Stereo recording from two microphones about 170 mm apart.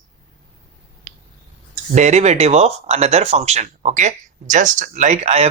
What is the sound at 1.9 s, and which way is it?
Speech, 45° right (ahead or behind).